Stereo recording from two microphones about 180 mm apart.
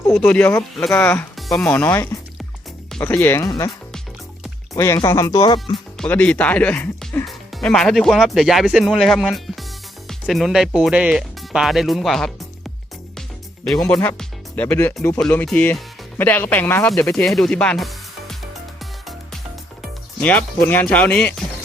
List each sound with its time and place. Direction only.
0.1 s speech: 5° left (ahead or behind)
4.7 s speech: 15° left (ahead or behind)
6.0 s speech: 5° left (ahead or behind)
13.7 s speech: 10° left (ahead or behind)
18.8 s music: centre (ahead or behind)
19.8 s speech: 10° left (ahead or behind)